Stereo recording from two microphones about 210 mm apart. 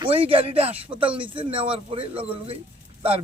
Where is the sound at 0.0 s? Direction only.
25° right (ahead or behind).